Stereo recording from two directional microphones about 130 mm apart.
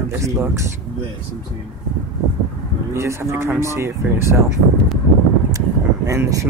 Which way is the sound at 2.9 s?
20° right (ahead or behind).